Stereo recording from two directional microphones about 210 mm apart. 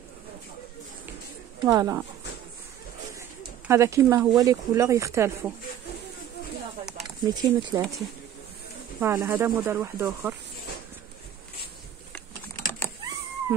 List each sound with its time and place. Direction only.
1.6 s speech: 15° right (ahead or behind)
3.2 s bird: 15° right (ahead or behind)
4.4 s speech: 15° right (ahead or behind)
7.4 s speech: 20° right (ahead or behind)
9.0 s speech: 10° right (ahead or behind)
12.1 s typing: 15° left (ahead or behind)
13.5 s music: 10° right (ahead or behind)